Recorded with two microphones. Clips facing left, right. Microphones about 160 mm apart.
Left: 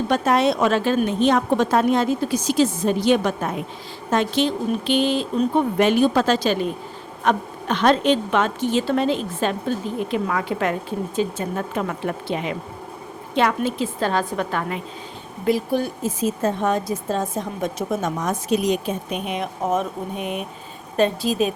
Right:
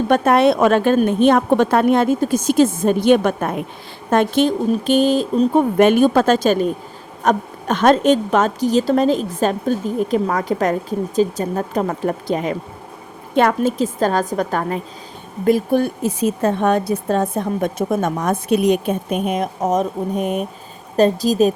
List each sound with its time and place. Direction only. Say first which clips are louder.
0.1 s a woman's voice: right 5 dB; 55° right (ahead or behind); by 14.8 s 40° right (ahead or behind)
15.4 s a woman's voice: right 5 dB; 50° right (ahead or behind)